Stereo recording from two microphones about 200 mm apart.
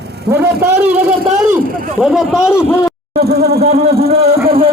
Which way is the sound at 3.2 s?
50° right (ahead or behind).